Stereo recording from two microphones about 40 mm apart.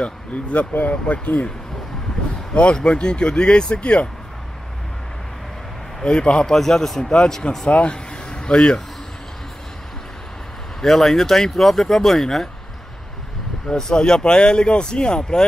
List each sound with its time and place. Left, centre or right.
0.0 s speech: left
2.5 s speech: left
6.0 s speech: left
6.4 s speech: centre
7.7 s speech: left
10.8 s speech: centre
13.9 s speech: centre